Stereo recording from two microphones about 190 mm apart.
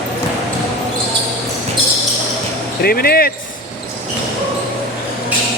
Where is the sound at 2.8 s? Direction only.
50° left (ahead or behind).